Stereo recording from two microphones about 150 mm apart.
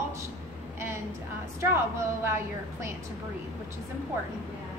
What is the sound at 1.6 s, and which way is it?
A woman's voice, 15° right (ahead or behind).